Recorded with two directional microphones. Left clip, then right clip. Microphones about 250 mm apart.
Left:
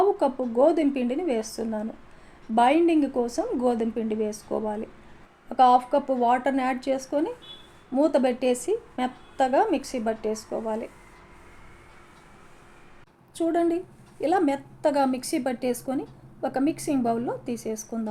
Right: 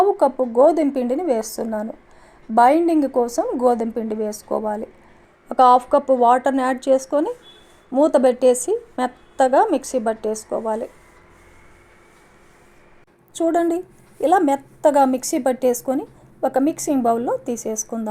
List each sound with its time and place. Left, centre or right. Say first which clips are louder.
0.2 s a woman's voice: right 7 dB; right
13.3 s a woman's voice: right 5 dB; right